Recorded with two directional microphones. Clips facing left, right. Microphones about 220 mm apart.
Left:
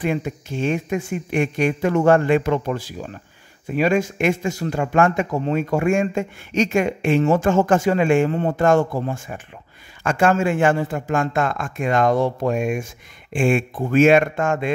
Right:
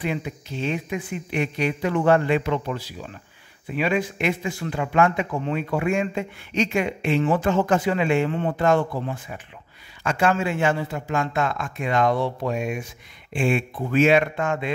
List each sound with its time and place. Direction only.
0.0 s speech: 50° left (ahead or behind)